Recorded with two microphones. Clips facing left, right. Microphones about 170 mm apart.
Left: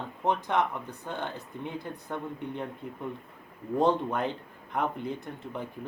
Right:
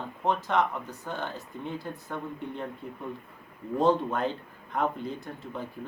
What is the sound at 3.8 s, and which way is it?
Speech, 15° left (ahead or behind).